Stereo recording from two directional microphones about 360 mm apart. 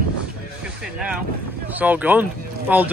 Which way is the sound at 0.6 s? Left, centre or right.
Centre.